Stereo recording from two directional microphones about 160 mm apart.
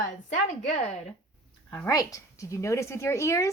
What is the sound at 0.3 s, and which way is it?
Speech, 45° left (ahead or behind).